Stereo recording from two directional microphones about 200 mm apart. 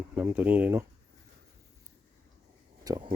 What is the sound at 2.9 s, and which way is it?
Speech, 20° right (ahead or behind).